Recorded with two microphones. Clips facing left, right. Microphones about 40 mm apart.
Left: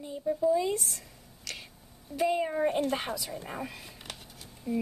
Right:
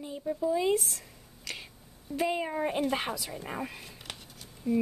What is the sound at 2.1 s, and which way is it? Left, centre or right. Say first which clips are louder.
A woman's voice: left 2 dB; centre.